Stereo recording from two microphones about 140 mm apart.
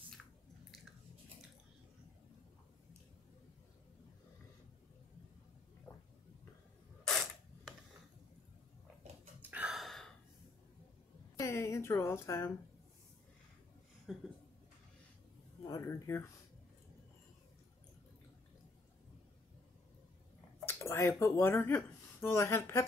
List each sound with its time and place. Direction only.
7.1 s camera: centre (ahead or behind)
9.4 s a sound: 10° right (ahead or behind)
11.3 s a woman's voice: 20° left (ahead or behind)
14.1 s a sound: centre (ahead or behind)
15.6 s speech: 25° left (ahead or behind)
20.6 s speech: 20° left (ahead or behind)